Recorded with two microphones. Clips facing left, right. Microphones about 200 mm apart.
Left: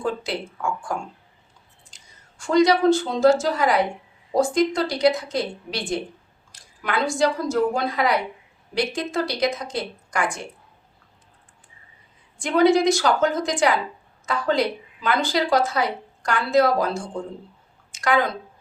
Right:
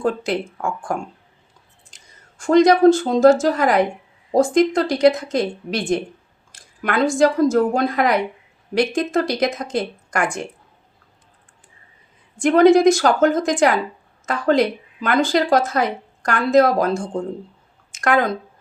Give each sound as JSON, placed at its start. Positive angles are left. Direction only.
{"t": 0.0, "sound": "speech", "side_deg": -50}
{"t": 2.4, "sound": "speech", "side_deg": -45}
{"t": 12.4, "sound": "speech", "side_deg": -50}